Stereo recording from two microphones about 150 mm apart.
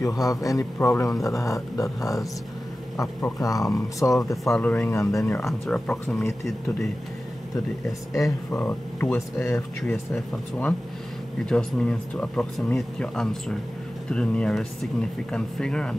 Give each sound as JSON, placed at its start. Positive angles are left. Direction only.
{"t": 0.0, "sound": "a man's voice", "side_deg": 20}
{"t": 4.5, "sound": "speech", "side_deg": 5}
{"t": 5.5, "sound": "speech", "side_deg": 5}
{"t": 8.1, "sound": "speech", "side_deg": 15}